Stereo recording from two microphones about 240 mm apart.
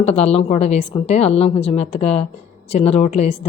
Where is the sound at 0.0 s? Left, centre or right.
Left.